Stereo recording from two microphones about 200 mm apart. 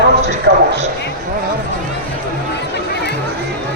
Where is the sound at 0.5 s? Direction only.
55° right (ahead or behind).